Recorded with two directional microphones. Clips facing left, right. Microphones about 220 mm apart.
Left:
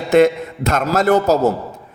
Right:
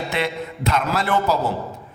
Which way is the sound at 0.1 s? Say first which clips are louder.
Left 12 dB; 45° left (ahead or behind).